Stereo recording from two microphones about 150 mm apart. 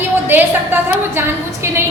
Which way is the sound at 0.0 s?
15° right (ahead or behind).